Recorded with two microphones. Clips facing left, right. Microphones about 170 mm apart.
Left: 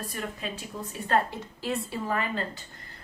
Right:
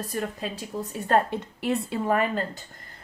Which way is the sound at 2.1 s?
45° right (ahead or behind).